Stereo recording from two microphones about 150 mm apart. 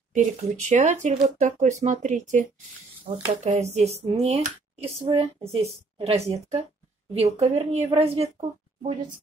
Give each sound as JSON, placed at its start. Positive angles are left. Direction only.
{"t": 0.1, "sound": "a woman's voice", "side_deg": -55}